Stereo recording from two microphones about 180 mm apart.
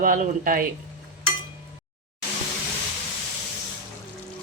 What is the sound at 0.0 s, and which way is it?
Speech, 50° right (ahead or behind).